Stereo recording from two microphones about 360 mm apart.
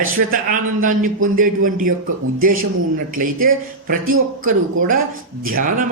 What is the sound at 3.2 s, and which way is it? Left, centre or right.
Speech, right.